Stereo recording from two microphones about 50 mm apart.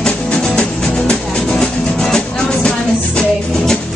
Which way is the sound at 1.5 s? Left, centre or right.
Centre.